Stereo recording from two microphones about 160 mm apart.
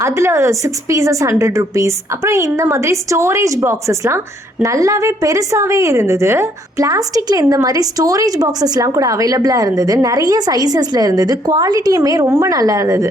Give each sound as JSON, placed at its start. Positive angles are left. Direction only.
{"t": 0.0, "sound": "a woman's voice", "side_deg": -15}